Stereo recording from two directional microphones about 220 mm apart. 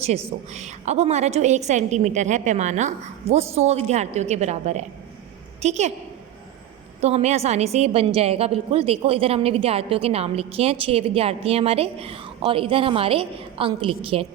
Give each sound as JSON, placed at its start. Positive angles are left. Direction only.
{"t": 0.5, "sound": "a woman's voice", "side_deg": -30}
{"t": 7.0, "sound": "a woman's voice", "side_deg": -30}